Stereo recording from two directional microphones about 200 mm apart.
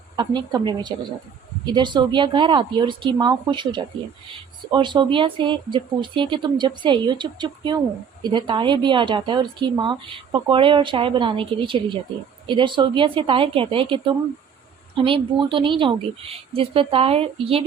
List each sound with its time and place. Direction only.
0.2 s a woman's voice: 20° right (ahead or behind)